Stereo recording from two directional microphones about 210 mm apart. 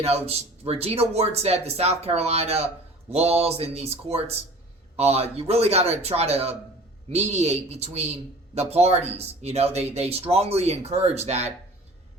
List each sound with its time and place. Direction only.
0.0 s a man's voice: 30° right (ahead or behind)